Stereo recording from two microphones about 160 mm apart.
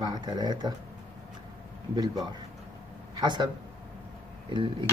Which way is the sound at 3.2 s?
25° right (ahead or behind).